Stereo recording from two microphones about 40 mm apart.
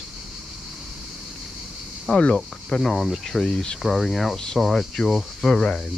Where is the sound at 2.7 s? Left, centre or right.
Centre.